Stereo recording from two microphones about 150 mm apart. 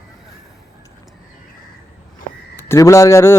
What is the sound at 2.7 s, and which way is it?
Speech, 20° left (ahead or behind).